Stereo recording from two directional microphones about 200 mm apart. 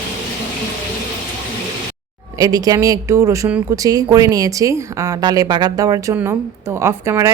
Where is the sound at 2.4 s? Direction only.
20° right (ahead or behind).